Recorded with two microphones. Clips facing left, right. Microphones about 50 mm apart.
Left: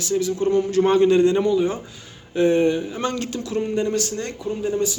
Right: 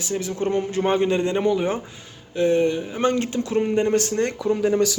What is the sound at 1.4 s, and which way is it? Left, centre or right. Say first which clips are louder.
Speech: left 1 dB; right.